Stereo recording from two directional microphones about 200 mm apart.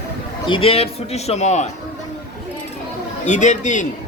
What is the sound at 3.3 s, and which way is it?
Speech, 35° left (ahead or behind).